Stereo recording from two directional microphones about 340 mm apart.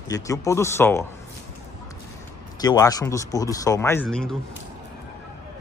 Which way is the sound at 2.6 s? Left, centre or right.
Centre.